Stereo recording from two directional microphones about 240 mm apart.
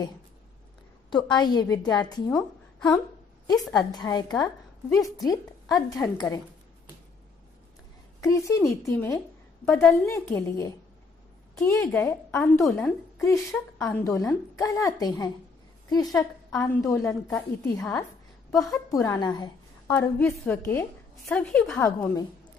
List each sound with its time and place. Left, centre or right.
1.1 s a woman's voice: centre
3.4 s a woman's voice: centre
8.2 s a woman's voice: centre
20.1 s a woman's voice: centre